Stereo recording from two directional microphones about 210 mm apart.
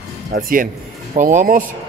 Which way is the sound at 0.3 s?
40° right (ahead or behind).